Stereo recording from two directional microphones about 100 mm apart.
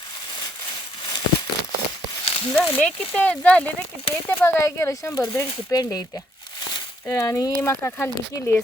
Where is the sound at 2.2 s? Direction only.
70° left (ahead or behind).